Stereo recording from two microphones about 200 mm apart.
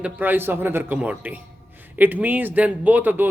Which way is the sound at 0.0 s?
10° right (ahead or behind).